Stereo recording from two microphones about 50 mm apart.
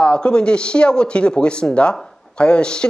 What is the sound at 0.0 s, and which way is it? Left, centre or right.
Speech, centre.